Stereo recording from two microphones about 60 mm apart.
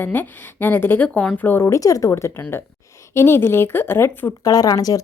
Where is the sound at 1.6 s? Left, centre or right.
Left.